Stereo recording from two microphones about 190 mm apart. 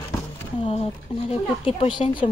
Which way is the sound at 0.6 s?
30° left (ahead or behind).